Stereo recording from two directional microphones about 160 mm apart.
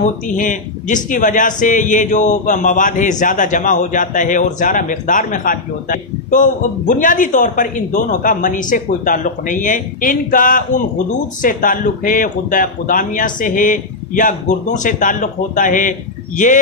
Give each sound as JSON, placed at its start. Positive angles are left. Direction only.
{"t": 0.0, "sound": "speech", "side_deg": 55}